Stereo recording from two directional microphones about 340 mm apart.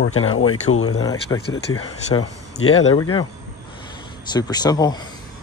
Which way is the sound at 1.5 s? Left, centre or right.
Left.